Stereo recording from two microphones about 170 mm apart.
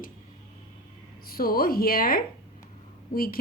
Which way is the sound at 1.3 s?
60° left (ahead or behind).